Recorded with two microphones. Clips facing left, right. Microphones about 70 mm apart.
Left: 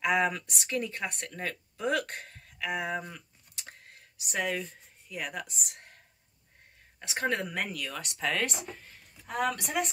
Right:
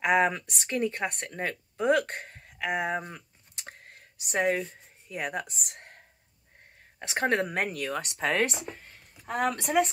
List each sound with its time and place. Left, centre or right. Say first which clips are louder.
0.0 s speech: right 3 dB; right
3.1 s a sound: right 2 dB; right
7.0 s speech: right 4 dB; right